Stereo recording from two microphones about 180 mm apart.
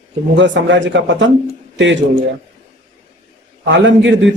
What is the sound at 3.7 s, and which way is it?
Speech, 90° right.